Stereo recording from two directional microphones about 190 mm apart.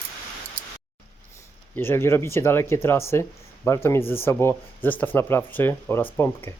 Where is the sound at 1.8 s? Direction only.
10° left (ahead or behind).